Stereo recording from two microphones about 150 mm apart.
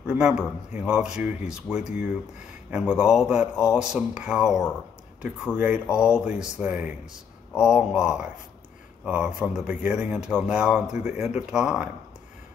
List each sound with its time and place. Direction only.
0.0 s speech: 5° right (ahead or behind)